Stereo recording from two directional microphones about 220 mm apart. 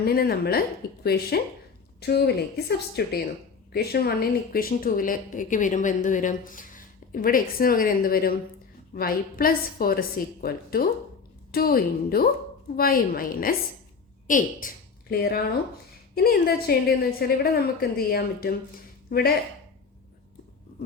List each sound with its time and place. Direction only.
0.0 s a woman's voice: 45° left (ahead or behind)